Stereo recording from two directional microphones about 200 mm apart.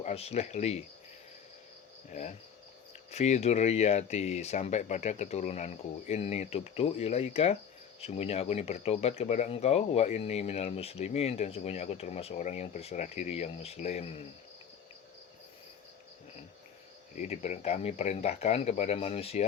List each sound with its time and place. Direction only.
0.0 s speech: 30° left (ahead or behind)
2.0 s speech: 35° left (ahead or behind)
17.2 s speech: 35° left (ahead or behind)